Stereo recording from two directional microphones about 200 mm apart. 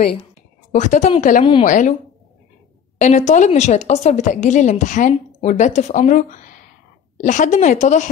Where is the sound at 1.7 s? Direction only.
40° left (ahead or behind).